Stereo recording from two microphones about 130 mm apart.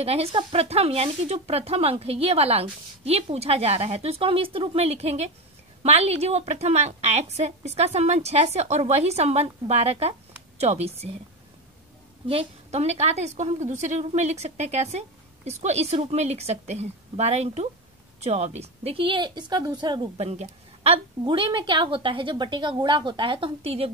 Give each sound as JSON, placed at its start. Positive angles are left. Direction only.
{"t": 0.0, "sound": "a woman's voice", "side_deg": -50}
{"t": 12.3, "sound": "a woman's voice", "side_deg": -50}
{"t": 20.2, "sound": "a woman's voice", "side_deg": -50}